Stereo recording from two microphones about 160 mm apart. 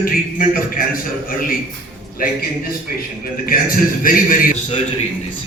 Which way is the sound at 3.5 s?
65° left (ahead or behind).